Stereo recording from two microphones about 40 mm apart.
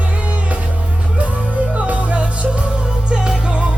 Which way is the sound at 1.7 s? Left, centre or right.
Right.